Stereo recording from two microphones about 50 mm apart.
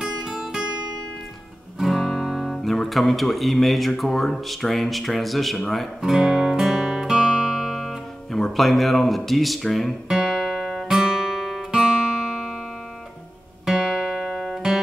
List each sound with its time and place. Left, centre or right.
0.0 s music: centre
1.8 s music: centre
2.5 s speech: centre
5.9 s music: centre
8.3 s speech: centre
10.0 s music: centre
10.9 s guitar: centre
11.7 s music: centre
13.7 s music: centre